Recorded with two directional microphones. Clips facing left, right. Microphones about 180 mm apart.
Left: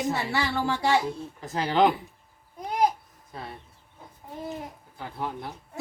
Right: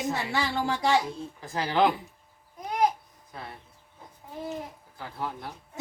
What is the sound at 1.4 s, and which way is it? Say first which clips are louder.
Speech: left 2 dB; 20° left (ahead or behind).